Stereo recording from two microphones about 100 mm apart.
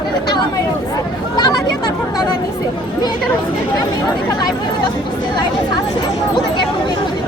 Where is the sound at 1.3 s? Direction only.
45° left (ahead or behind).